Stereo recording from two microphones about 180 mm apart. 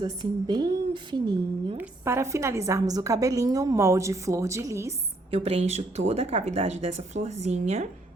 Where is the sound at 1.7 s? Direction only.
10° right (ahead or behind).